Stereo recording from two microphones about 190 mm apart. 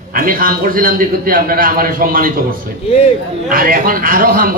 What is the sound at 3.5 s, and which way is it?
A man's voice, 50° right (ahead or behind).